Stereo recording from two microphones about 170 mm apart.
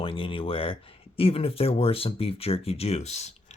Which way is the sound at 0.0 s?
30° left (ahead or behind).